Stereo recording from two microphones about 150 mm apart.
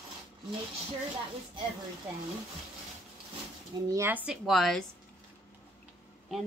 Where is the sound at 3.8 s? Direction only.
15° right (ahead or behind); by 4.9 s centre (ahead or behind).